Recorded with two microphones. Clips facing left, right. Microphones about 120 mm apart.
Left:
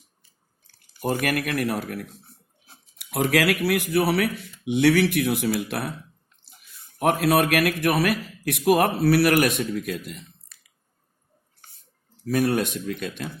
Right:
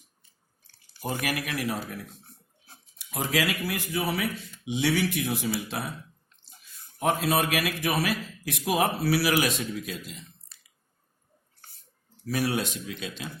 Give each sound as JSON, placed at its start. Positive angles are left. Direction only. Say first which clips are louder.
{"t": 1.0, "sound": "a man's voice", "louder": "left 6 dB", "side_deg": 60}
{"t": 10.5, "sound": "a sound", "louder": "left 2 dB", "side_deg": -30}
{"t": 12.2, "sound": "a man's voice", "louder": "left 6 dB", "side_deg": 50}